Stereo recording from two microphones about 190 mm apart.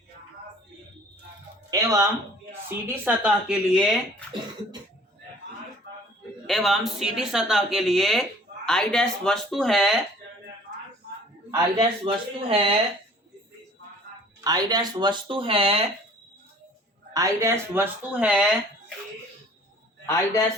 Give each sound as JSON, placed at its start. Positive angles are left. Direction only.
{"t": 1.7, "sound": "a sound", "side_deg": -20}
{"t": 3.0, "sound": "speech", "side_deg": -5}
{"t": 6.5, "sound": "speech", "side_deg": 0}
{"t": 10.7, "sound": "a sound", "side_deg": -60}
{"t": 11.5, "sound": "speech", "side_deg": -25}
{"t": 14.4, "sound": "speech", "side_deg": -20}
{"t": 17.2, "sound": "speech", "side_deg": -15}
{"t": 20.1, "sound": "a man's voice", "side_deg": 15}